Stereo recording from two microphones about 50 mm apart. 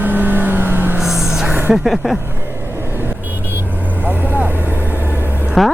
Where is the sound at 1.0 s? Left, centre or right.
Centre.